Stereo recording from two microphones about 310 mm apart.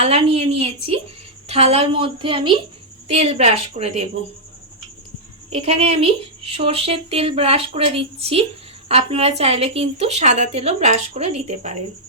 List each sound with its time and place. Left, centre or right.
0.0 s a woman's voice: centre
5.5 s speech: centre